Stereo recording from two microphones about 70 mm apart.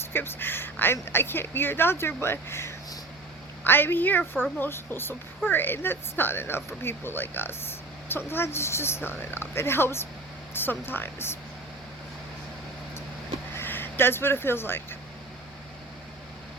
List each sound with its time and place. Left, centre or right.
0.1 s a woman's voice: left
13.5 s speech: left